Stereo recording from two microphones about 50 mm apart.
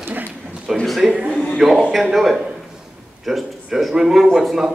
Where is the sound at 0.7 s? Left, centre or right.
Centre.